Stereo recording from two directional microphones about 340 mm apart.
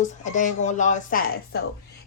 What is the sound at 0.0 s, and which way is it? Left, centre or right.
Speech, left.